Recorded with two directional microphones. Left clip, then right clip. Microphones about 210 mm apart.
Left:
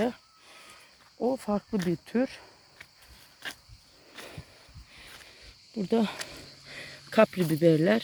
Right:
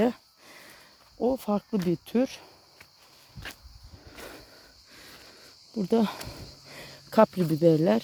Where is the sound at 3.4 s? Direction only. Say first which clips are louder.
Left 2 dB; 15° left (ahead or behind).